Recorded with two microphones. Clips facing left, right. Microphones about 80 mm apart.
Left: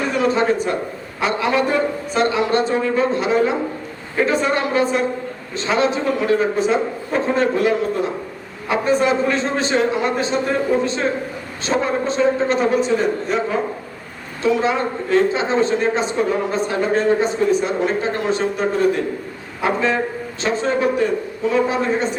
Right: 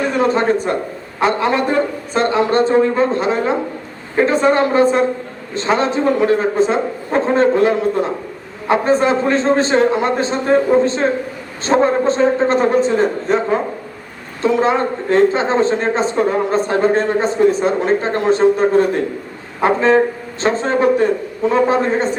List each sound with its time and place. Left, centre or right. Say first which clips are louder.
0.2 s a man's voice: right 2 dB; right
11.6 s a man's voice: right 6 dB; right
19.6 s a man's voice: right 6 dB; right